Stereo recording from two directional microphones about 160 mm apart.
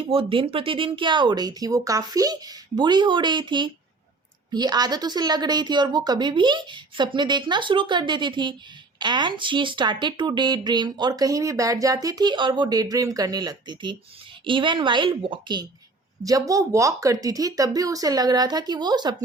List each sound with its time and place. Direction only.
0.0 s a woman's voice: 35° right (ahead or behind)